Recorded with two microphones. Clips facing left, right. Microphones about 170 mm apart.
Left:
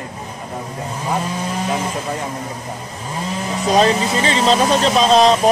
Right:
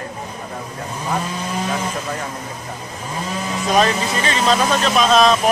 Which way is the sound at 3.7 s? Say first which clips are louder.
Left 3 dB; 25° left (ahead or behind).